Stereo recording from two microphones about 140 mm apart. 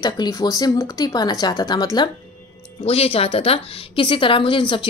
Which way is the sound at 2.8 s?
45° left (ahead or behind).